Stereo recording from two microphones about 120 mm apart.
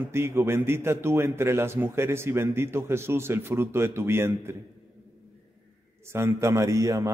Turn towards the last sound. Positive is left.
turn(degrees=-25)  # may be behind; listen again after turning